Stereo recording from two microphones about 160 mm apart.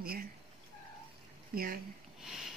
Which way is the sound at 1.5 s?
65° right (ahead or behind).